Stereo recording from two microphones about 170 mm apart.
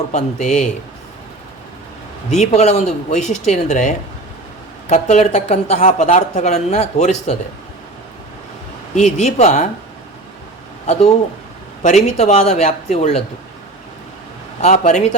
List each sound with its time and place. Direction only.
0.1 s speech: 40° left (ahead or behind)
2.3 s speech: 40° left (ahead or behind)
9.0 s speech: 45° left (ahead or behind)
11.8 s speech: 45° left (ahead or behind)
14.6 s speech: 45° left (ahead or behind)